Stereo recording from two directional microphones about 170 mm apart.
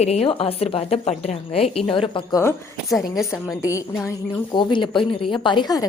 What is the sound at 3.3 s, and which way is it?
Speech, 20° left (ahead or behind).